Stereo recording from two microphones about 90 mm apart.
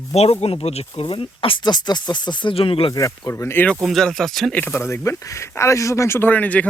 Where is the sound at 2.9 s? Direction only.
35° left (ahead or behind).